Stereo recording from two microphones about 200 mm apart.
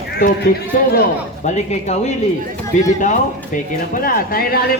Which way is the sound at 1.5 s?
35° left (ahead or behind).